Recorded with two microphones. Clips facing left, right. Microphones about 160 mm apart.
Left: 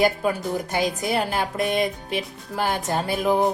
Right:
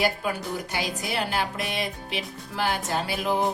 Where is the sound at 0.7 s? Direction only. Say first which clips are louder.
Left 9 dB; 45° left (ahead or behind).